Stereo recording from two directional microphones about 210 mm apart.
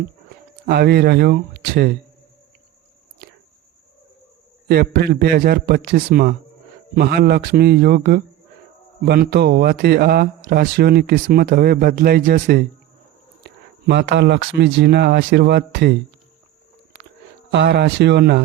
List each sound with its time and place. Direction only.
0.6 s speech: 50° right (ahead or behind)
4.7 s speech: 50° right (ahead or behind)
17.5 s a man's voice: 55° right (ahead or behind)